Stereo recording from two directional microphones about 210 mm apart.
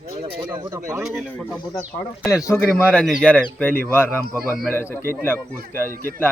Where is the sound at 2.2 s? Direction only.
15° left (ahead or behind).